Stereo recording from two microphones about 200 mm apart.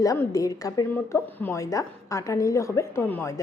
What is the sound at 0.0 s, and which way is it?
A woman's voice, 15° left (ahead or behind).